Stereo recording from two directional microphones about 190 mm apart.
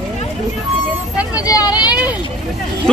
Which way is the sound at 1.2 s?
20° left (ahead or behind).